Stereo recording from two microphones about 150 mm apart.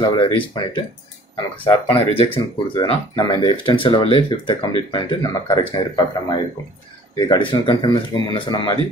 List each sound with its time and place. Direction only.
0.0 s speech: 30° left (ahead or behind)